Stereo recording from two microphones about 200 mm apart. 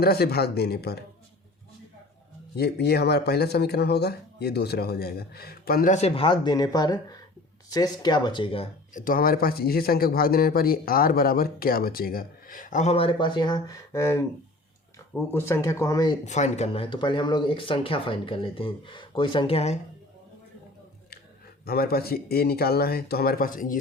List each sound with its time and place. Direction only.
0.0 s speech: 50° left (ahead or behind)
2.6 s speech: 55° left (ahead or behind); by 16.1 s 15° left (ahead or behind)
16.2 s speech: 35° left (ahead or behind)
21.7 s speech: 50° left (ahead or behind)